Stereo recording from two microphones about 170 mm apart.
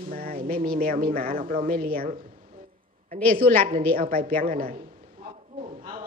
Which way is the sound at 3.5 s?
55° right (ahead or behind).